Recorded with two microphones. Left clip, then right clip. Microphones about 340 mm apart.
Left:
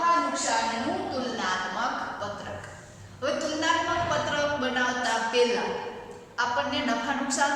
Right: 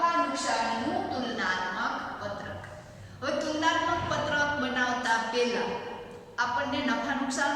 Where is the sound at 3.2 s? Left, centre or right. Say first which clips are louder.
Left 1 dB; centre.